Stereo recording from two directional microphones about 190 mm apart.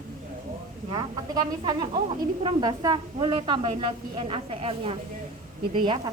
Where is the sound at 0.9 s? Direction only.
20° right (ahead or behind).